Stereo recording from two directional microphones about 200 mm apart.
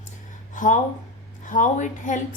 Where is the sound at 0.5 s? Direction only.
40° left (ahead or behind).